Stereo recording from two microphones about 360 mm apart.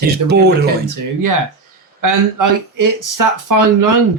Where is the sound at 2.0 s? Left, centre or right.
Right.